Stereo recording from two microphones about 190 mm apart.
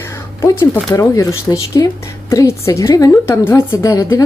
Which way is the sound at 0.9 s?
15° left (ahead or behind).